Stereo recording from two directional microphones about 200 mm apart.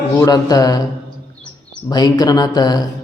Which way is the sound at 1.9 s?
20° left (ahead or behind).